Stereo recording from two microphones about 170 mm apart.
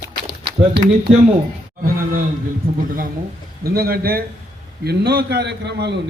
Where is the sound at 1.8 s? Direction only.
60° right (ahead or behind).